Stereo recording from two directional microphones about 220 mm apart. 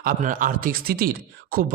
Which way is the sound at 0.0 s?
40° right (ahead or behind).